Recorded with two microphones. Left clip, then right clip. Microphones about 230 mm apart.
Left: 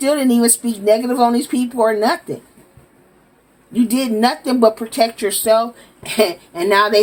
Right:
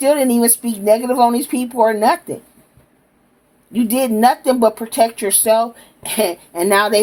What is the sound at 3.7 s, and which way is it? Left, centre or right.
Speech, right.